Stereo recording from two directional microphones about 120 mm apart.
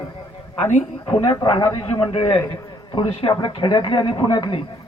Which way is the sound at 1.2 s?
50° left (ahead or behind).